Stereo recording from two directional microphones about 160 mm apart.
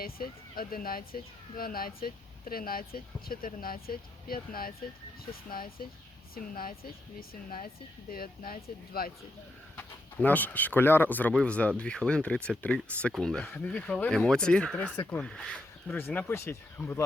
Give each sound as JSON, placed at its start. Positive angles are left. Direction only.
{"t": 0.0, "sound": "speech", "side_deg": 65}
{"t": 9.7, "sound": "speech", "side_deg": 10}